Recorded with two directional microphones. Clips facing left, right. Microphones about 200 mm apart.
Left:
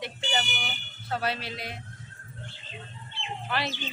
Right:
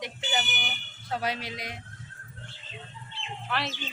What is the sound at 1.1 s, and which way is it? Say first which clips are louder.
Speech: left 1 dB; 15° right (ahead or behind).